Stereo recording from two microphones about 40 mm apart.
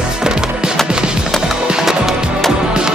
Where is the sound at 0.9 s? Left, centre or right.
Right.